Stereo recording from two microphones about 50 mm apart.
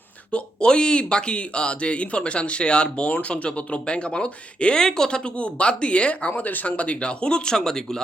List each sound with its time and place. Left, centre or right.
0.3 s speech: centre